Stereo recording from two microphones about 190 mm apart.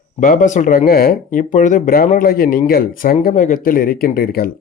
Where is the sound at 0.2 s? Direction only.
45° left (ahead or behind).